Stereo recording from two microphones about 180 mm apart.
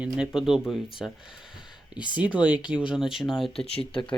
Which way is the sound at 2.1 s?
5° right (ahead or behind).